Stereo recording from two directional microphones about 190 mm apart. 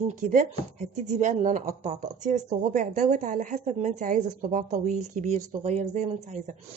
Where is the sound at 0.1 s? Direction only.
45° right (ahead or behind).